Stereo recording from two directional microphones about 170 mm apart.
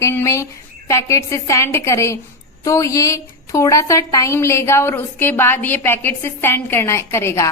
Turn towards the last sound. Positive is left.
turn(degrees=15)  # may be behind; listen again after turning